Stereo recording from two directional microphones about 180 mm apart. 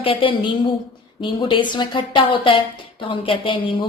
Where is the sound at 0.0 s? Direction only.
30° left (ahead or behind).